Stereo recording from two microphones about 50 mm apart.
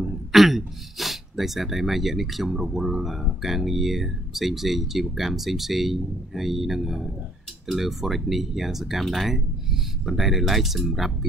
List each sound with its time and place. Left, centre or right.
0.0 s speech: centre